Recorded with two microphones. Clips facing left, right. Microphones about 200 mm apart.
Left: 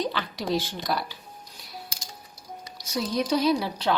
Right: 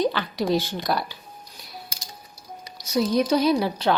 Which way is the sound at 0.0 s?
55° right (ahead or behind).